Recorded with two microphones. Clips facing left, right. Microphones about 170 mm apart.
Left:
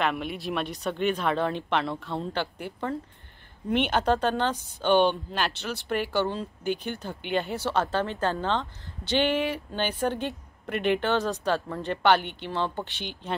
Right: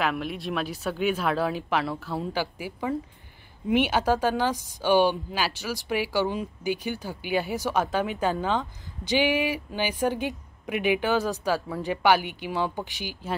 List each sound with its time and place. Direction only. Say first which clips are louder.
0.0 s speech: even; centre (ahead or behind)